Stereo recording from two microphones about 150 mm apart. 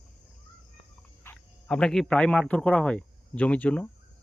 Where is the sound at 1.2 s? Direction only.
5° left (ahead or behind).